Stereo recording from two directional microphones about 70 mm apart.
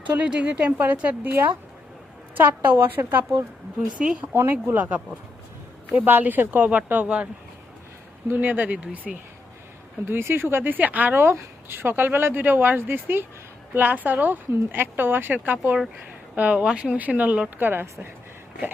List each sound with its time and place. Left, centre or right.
0.1 s speech: centre
3.9 s speech: centre
4.4 s speech: right
8.3 s speech: right
10.1 s speech: right; by 17.7 s centre